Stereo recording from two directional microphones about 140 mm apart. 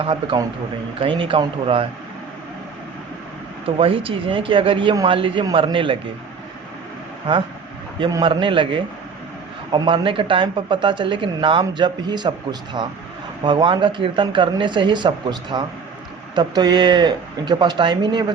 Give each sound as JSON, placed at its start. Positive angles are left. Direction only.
{"t": 0.0, "sound": "speech", "side_deg": -40}
{"t": 3.8, "sound": "speech", "side_deg": -40}
{"t": 8.2, "sound": "speech", "side_deg": -35}